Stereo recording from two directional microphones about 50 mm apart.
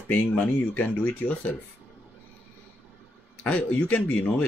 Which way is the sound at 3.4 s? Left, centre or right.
Left.